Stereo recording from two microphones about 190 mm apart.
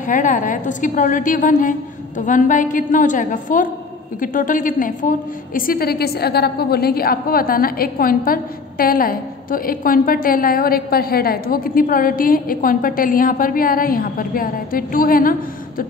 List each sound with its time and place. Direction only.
0.0 s a woman's voice: 45° left (ahead or behind)